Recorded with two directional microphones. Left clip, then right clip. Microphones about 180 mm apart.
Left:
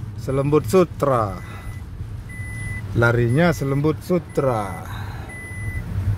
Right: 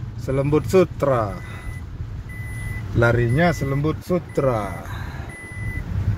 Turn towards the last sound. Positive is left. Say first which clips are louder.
# even
turn(degrees=10)  # may be behind; listen again after turning